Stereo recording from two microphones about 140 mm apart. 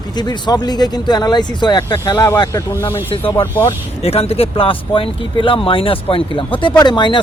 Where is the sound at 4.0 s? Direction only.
45° left (ahead or behind).